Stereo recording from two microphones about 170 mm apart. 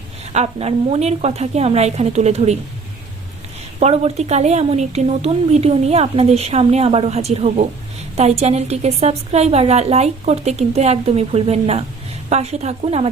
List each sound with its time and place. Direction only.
0.3 s a woman's voice: 40° right (ahead or behind)
3.8 s a woman's voice: 40° right (ahead or behind)